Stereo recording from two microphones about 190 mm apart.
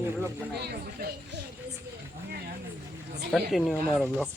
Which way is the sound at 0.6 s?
60° right (ahead or behind).